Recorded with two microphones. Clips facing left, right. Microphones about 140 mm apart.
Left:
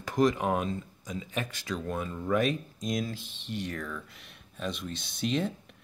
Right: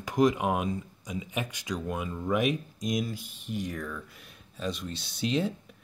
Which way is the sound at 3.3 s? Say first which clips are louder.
Right 2 dB; 80° left.